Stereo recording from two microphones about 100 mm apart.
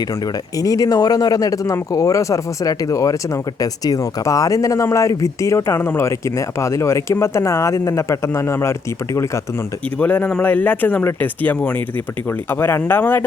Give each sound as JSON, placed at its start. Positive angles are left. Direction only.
{"t": 0.5, "sound": "speech", "side_deg": 35}
{"t": 10.0, "sound": "speech", "side_deg": 15}